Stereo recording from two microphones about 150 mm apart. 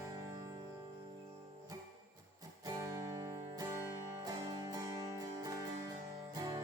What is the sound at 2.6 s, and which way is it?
Music, 20° right (ahead or behind).